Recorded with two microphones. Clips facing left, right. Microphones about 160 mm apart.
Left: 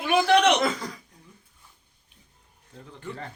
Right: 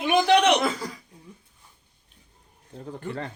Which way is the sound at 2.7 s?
45° right (ahead or behind).